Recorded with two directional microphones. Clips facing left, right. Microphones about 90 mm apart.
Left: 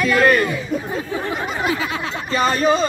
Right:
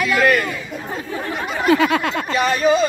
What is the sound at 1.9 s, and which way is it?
Speech, 65° right (ahead or behind).